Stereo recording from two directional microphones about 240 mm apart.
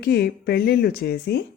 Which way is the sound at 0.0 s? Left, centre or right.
Left.